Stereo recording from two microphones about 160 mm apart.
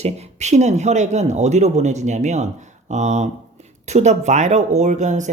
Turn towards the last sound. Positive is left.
turn(degrees=-50)  # may be behind; listen again after turning